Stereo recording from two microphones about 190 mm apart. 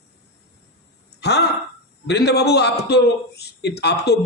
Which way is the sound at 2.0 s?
60° left (ahead or behind).